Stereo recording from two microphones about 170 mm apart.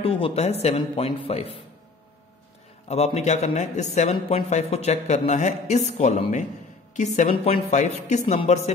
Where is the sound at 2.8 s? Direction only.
40° left (ahead or behind).